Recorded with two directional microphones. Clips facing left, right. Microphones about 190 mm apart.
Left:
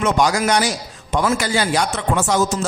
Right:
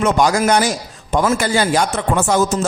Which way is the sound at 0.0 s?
50° right (ahead or behind).